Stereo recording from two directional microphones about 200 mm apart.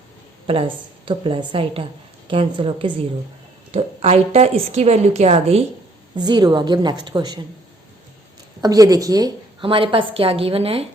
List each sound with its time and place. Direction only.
1.0 s a woman's voice: 25° right (ahead or behind)
8.6 s a woman's voice: 20° right (ahead or behind)